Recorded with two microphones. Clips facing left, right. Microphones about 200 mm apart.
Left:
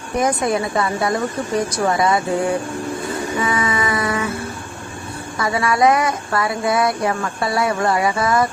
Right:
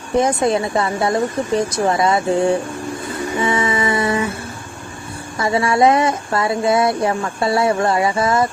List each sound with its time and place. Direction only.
0.2 s speech: 25° right (ahead or behind)
3.4 s a sound: 25° right (ahead or behind)
5.4 s speech: 25° right (ahead or behind)